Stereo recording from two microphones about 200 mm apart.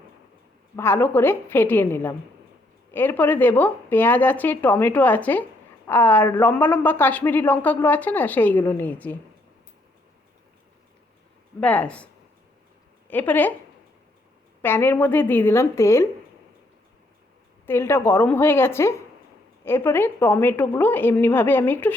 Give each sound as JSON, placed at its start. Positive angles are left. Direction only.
{"t": 0.8, "sound": "speech", "side_deg": 10}
{"t": 11.6, "sound": "speech", "side_deg": 5}
{"t": 13.1, "sound": "a woman's voice", "side_deg": 10}
{"t": 14.6, "sound": "speech", "side_deg": 10}
{"t": 17.7, "sound": "speech", "side_deg": 10}